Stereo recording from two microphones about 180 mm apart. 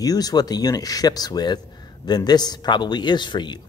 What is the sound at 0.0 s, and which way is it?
A man's voice, 20° left (ahead or behind).